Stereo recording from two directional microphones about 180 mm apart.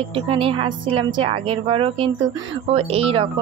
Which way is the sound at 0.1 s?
30° right (ahead or behind).